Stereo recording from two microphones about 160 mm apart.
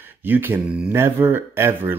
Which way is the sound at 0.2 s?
10° right (ahead or behind).